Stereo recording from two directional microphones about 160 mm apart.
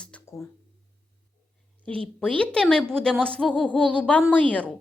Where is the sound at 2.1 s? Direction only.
5° left (ahead or behind).